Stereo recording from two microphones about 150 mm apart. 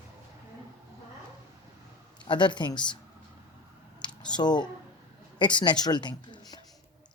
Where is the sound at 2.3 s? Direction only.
30° left (ahead or behind).